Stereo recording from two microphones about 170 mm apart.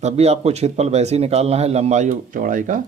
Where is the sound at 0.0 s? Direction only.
40° right (ahead or behind).